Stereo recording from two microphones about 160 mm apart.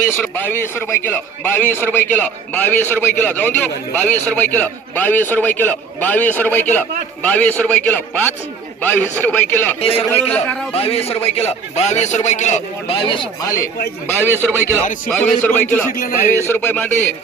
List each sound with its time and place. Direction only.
0.1 s a man's voice: 15° left (ahead or behind)
9.8 s speech: 40° left (ahead or behind)
10.1 s a man's voice: 10° left (ahead or behind)
10.7 s a man's voice: 40° left (ahead or behind)
13.0 s speech: 30° left (ahead or behind)
14.1 s a man's voice: 10° left (ahead or behind)